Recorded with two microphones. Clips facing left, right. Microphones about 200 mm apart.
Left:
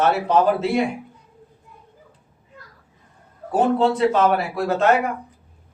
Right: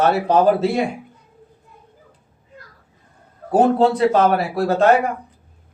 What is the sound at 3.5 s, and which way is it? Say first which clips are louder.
Speech: right 3 dB; 40° right (ahead or behind).